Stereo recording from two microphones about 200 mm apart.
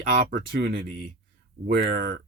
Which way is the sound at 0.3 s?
45° right (ahead or behind).